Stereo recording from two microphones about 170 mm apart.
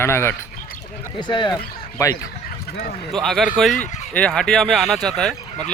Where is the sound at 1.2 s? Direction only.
25° left (ahead or behind).